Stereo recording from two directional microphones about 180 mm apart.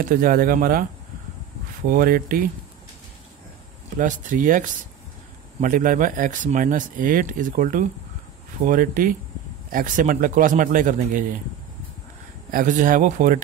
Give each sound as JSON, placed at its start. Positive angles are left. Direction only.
{"t": 0.0, "sound": "speech", "side_deg": -50}
{"t": 1.9, "sound": "speech", "side_deg": -50}
{"t": 4.0, "sound": "speech", "side_deg": -45}
{"t": 12.4, "sound": "speech", "side_deg": -50}